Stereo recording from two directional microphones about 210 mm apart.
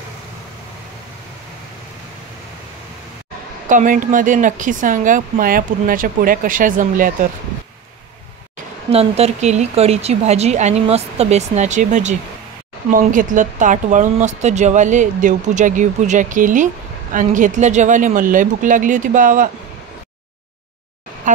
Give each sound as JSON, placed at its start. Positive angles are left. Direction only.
{"t": 3.6, "sound": "speech", "side_deg": -40}
{"t": 8.9, "sound": "speech", "side_deg": -30}